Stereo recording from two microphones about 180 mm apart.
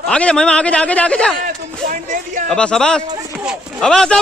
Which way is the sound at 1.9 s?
45° right (ahead or behind).